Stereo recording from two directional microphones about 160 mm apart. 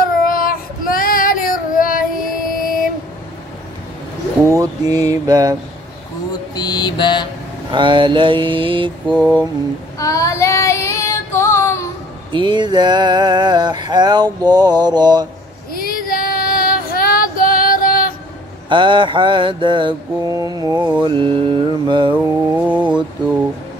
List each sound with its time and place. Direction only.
0.3 s child singing: 65° left (ahead or behind)
4.5 s a sound: 20° right (ahead or behind)
6.5 s mantra: 25° left (ahead or behind)
7.7 s mantra: 30° right (ahead or behind)
9.1 s mantra: 5° left (ahead or behind)
9.9 s child singing: 20° left (ahead or behind)
12.3 s a sound: 30° right (ahead or behind)
15.7 s female singing: 65° left (ahead or behind)
18.7 s a sound: 30° right (ahead or behind)
21.0 s mantra: 30° right (ahead or behind)
22.1 s mantra: 10° right (ahead or behind)